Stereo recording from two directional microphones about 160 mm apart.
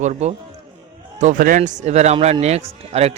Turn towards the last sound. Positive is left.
turn(degrees=-40)  # may be behind; listen again after turning